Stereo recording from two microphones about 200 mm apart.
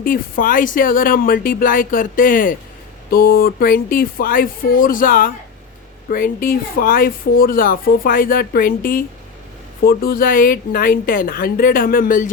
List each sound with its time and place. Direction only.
0.0 s speech: 45° left (ahead or behind)